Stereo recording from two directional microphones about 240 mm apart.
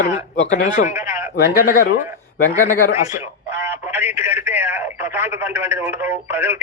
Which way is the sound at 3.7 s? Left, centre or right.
Centre.